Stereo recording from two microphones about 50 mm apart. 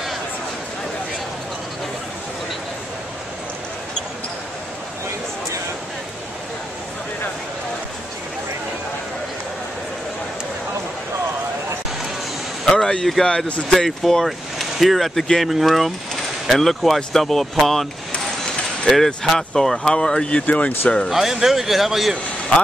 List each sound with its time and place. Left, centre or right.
12.6 s a sound: centre
13.2 s speech: centre
19.0 s speech: centre; by 20.7 s left
21.1 s speech: centre